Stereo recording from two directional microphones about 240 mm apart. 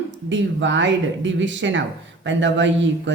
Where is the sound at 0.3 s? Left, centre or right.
Right.